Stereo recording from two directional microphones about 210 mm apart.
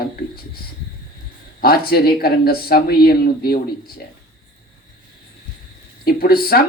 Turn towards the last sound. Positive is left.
turn(degrees=45)  # may be behind; listen again after turning